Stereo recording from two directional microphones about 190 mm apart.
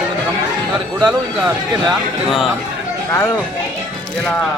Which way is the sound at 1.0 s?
10° right (ahead or behind).